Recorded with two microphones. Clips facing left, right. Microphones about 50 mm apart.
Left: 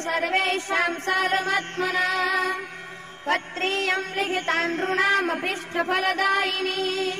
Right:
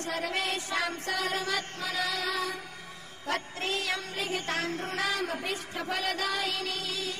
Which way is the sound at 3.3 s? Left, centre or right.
Left.